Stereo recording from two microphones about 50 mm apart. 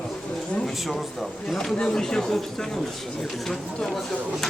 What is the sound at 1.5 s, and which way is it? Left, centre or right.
Speech, centre.